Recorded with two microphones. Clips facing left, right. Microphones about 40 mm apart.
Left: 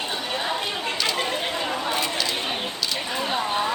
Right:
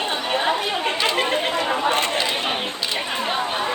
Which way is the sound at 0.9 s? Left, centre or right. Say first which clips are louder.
Right 5 dB; right.